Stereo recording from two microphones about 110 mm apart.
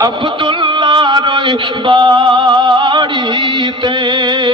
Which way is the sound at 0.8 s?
45° right (ahead or behind).